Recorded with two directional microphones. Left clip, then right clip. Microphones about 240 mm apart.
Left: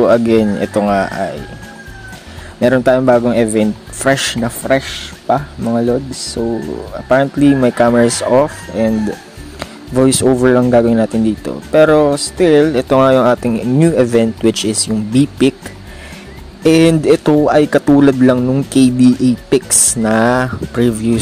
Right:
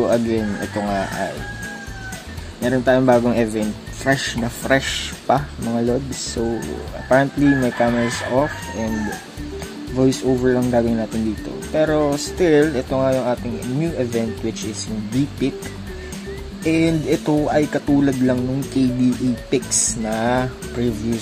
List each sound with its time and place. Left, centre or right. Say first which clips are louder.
0.0 s speech: left 8 dB; left
2.6 s speech: left 6 dB; left
4.6 s speech: left 3 dB; centre
7.6 s speech: left 8 dB; left
9.9 s speech: left 7 dB; left
12.9 s speech: left 13 dB; left
16.6 s speech: left 9 dB; left